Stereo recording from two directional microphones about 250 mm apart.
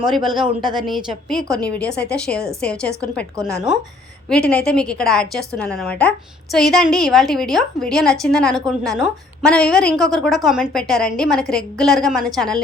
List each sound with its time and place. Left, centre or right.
0.0 s a woman's voice: centre
4.3 s a woman's voice: centre